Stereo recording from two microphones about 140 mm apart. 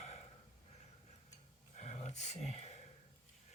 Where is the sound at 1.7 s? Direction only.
55° left (ahead or behind).